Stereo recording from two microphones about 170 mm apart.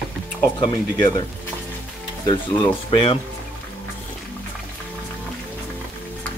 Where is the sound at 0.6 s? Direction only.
25° left (ahead or behind).